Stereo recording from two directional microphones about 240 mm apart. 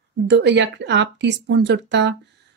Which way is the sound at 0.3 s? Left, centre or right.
Right.